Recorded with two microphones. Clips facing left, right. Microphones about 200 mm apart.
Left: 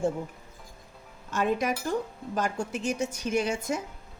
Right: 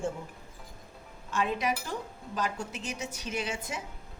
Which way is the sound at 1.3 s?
45° left (ahead or behind).